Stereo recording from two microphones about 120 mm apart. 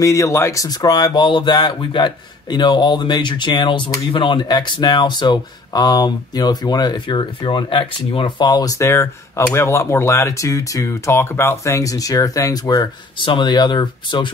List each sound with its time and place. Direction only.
0.0 s speech: 25° left (ahead or behind)
13.2 s speech: 40° left (ahead or behind)